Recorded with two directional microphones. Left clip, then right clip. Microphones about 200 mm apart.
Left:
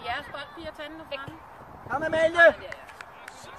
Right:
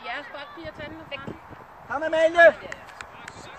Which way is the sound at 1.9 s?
25° left (ahead or behind).